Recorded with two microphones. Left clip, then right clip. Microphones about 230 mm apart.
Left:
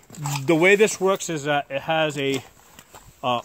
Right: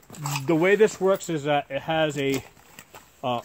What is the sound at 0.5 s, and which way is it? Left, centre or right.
Speech, left.